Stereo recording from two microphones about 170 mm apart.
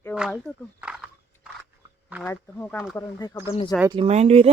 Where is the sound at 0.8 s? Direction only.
5° right (ahead or behind).